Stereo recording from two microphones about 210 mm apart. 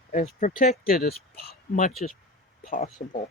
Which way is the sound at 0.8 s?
45° left (ahead or behind).